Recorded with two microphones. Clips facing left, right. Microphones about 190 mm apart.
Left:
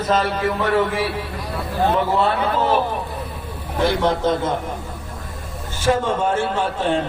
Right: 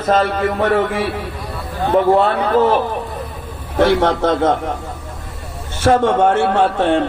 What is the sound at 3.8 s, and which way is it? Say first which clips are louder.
Speech: right 5 dB; 70° right (ahead or behind).